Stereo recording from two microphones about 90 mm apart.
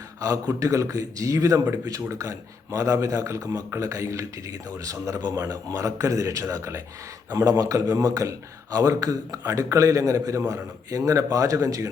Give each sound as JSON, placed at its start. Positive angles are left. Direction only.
{"t": 0.2, "sound": "speech", "side_deg": -40}